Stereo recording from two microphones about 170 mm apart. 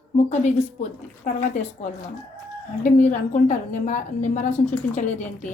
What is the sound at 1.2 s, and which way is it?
Speech, 50° left (ahead or behind).